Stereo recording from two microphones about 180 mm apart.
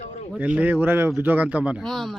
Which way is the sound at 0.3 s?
10° right (ahead or behind).